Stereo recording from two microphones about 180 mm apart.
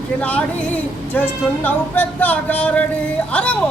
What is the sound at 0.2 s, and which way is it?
A woman's voice, 10° left (ahead or behind).